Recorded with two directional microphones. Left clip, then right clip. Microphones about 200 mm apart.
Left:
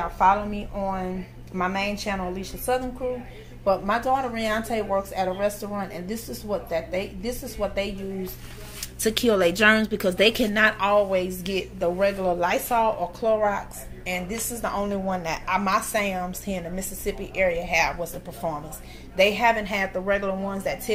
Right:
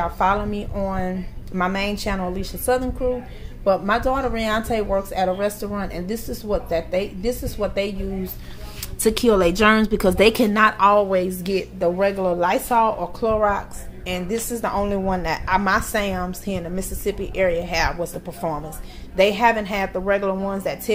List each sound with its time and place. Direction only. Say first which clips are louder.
0.0 s speech: even; 30° right (ahead or behind)
9.0 s speech: right 4 dB; 25° right (ahead or behind)